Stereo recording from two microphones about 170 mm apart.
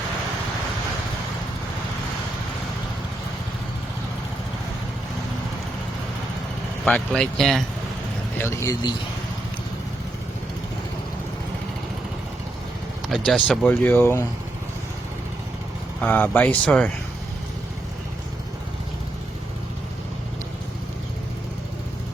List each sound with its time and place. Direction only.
6.8 s speech: 5° left (ahead or behind)
8.4 s speech: 15° left (ahead or behind)
13.1 s speech: centre (ahead or behind)
13.8 s speech: 15° left (ahead or behind)
16.0 s speech: 10° left (ahead or behind)